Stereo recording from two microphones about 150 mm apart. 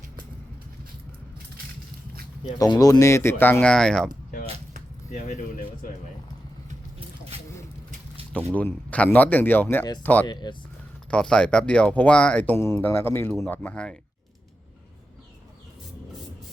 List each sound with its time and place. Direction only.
2.6 s speech: 25° left (ahead or behind); by 4.1 s 5° left (ahead or behind)
8.5 s speech: 10° left (ahead or behind)
10.2 s speech: 30° left (ahead or behind)
11.1 s speech: 5° left (ahead or behind)